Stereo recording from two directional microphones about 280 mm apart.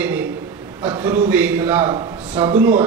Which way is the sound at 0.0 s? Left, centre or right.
Centre.